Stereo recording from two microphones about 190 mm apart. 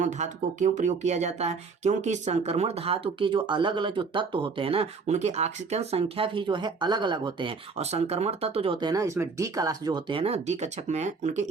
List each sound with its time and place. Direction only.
0.0 s speech: 40° right (ahead or behind)